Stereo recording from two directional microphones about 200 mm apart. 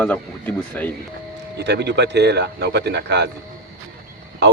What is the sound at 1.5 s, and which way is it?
Speech, 55° right (ahead or behind).